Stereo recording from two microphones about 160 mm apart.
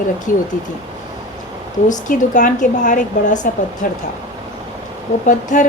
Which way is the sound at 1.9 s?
50° left (ahead or behind).